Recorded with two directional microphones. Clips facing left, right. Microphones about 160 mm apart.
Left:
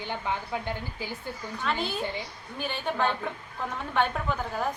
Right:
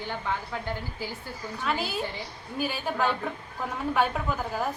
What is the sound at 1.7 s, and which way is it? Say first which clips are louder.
A woman's voice: even; 5° right (ahead or behind).